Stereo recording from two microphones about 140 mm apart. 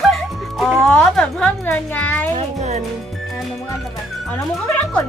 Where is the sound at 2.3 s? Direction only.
55° right (ahead or behind).